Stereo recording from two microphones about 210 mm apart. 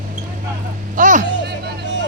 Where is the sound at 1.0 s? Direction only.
35° right (ahead or behind).